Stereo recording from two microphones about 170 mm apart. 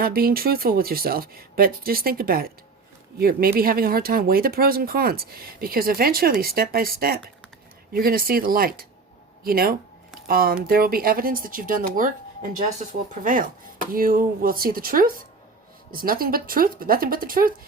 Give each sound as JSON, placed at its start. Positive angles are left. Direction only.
{"t": 0.0, "sound": "speech", "side_deg": -60}
{"t": 13.2, "sound": "chopping", "side_deg": -55}
{"t": 13.9, "sound": "speech", "side_deg": -55}